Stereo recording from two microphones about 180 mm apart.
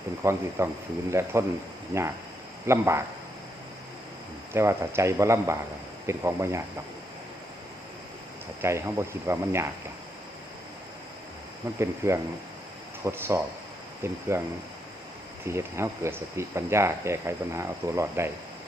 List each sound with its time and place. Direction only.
0.2 s speech: 15° right (ahead or behind)
4.5 s speech: 15° right (ahead or behind)
8.6 s speech: 15° right (ahead or behind)
11.8 s speech: 15° right (ahead or behind)
15.4 s speech: 15° right (ahead or behind)